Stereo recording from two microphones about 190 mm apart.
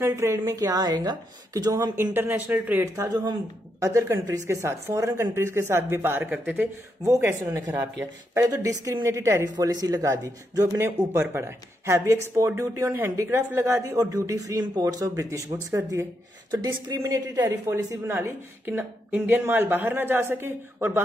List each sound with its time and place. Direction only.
0.0 s speech: 15° right (ahead or behind)